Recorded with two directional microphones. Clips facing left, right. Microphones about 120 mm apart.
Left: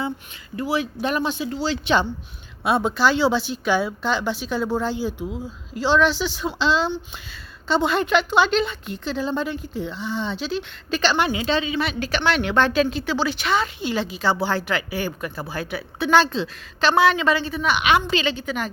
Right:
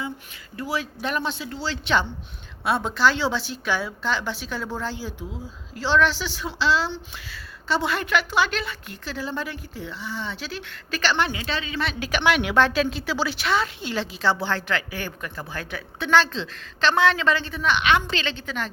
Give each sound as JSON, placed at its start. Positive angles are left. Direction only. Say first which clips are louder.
{"t": 0.5, "sound": "a woman's voice", "louder": "left 5 dB", "side_deg": 15}
{"t": 11.9, "sound": "a woman's voice", "louder": "right 3 dB", "side_deg": -10}